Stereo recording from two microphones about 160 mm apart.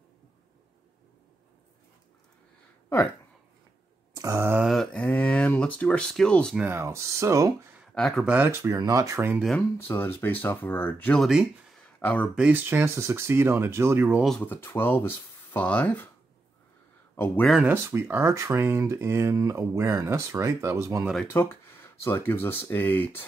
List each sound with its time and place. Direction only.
4.1 s mantra: 20° right (ahead or behind)
4.6 s a sound: 5° left (ahead or behind)
6.6 s speech: 15° right (ahead or behind)
7.9 s speech: 5° left (ahead or behind)
8.4 s speech: 15° right (ahead or behind)
9.5 s speech: 10° left (ahead or behind)
11.2 s speech: 5° right (ahead or behind)
12.0 s speech: 10° left (ahead or behind)
12.4 s speech: 10° right (ahead or behind)
14.2 s speech: 5° left (ahead or behind)
17.5 s speech: 5° right (ahead or behind)
17.7 s speech: 15° right (ahead or behind)
21.3 s speech: 15° left (ahead or behind)